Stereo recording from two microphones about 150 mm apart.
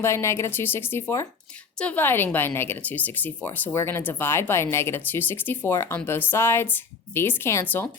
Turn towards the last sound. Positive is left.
turn(degrees=15)  # may be behind; listen again after turning